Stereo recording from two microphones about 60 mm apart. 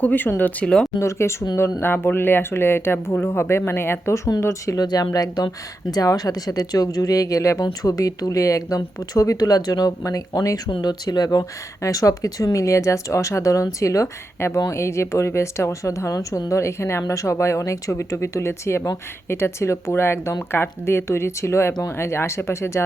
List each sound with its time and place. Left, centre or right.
0.0 s speech: left
0.6 s speech: centre
0.9 s speech: left
1.8 s speech: left
4.4 s speech: left
7.6 s speech: left
14.3 s speech: left